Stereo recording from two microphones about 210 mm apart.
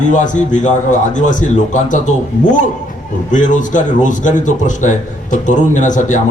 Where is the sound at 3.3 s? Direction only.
35° left (ahead or behind).